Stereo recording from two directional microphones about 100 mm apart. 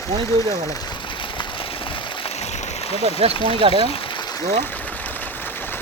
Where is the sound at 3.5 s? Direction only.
70° right (ahead or behind).